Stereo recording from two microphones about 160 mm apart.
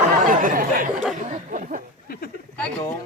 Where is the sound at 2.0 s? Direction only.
65° left (ahead or behind).